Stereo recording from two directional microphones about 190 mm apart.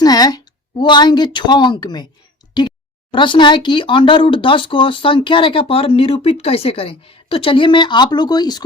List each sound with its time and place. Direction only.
0.0 s speech: 20° left (ahead or behind)